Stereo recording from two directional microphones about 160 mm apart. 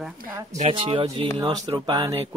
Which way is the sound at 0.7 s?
35° right (ahead or behind).